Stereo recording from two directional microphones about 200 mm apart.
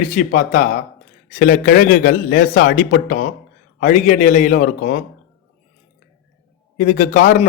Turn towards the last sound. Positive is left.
turn(degrees=40)  # may be behind; listen again after turning